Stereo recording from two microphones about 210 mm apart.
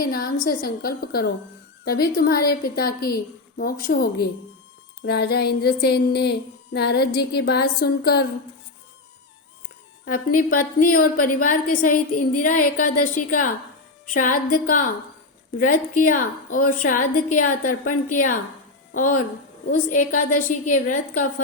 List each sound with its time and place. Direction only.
0.0 s a sound: 45° left (ahead or behind)
10.1 s a woman's voice: 40° left (ahead or behind)
14.1 s a woman's voice: 40° left (ahead or behind)